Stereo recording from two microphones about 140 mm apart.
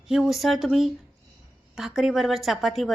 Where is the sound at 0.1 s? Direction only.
Centre (ahead or behind).